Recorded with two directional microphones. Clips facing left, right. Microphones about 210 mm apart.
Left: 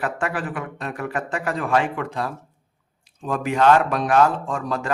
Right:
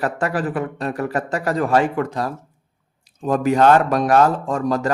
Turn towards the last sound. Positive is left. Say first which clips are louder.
# right 6 dB
turn(degrees=-40)  # may be behind; listen again after turning